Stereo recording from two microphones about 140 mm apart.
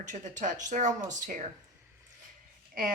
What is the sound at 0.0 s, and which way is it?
Speech, 60° right (ahead or behind).